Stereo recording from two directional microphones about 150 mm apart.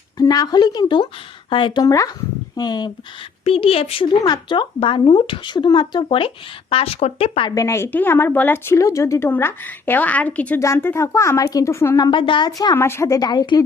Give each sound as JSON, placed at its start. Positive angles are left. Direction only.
{"t": 0.2, "sound": "a woman's voice", "side_deg": 25}
{"t": 3.4, "sound": "speech", "side_deg": 40}
{"t": 4.2, "sound": "speech", "side_deg": 30}
{"t": 7.5, "sound": "a woman's voice", "side_deg": 20}